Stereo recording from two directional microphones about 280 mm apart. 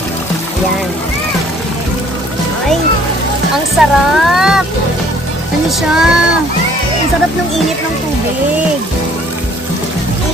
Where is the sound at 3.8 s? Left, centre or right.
Centre.